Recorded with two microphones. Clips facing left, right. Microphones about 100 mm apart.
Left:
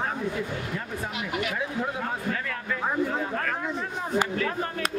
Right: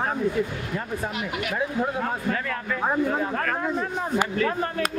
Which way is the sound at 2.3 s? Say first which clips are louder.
Right 3 dB; 50° right (ahead or behind).